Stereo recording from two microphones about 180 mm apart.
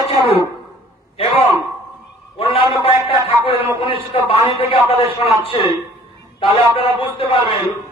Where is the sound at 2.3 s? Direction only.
30° left (ahead or behind).